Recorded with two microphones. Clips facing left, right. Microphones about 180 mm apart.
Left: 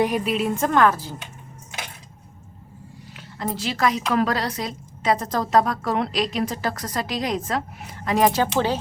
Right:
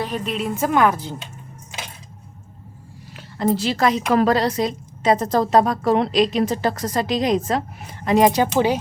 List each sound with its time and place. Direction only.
0.0 s a woman's voice: 10° left (ahead or behind)
0.3 s speech: centre (ahead or behind); by 1.1 s 15° right (ahead or behind)
3.3 s a woman's voice: 30° right (ahead or behind); by 8.8 s 15° right (ahead or behind)